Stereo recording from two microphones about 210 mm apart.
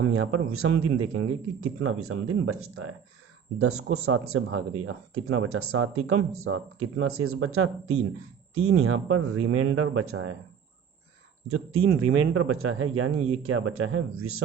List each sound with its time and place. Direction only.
0.0 s speech: 80° right
11.4 s speech: 85° right